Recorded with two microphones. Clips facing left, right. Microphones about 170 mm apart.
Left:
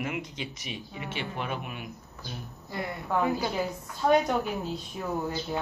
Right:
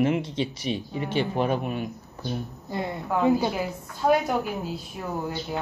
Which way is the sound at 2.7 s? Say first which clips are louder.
Right 3 dB; 25° right (ahead or behind).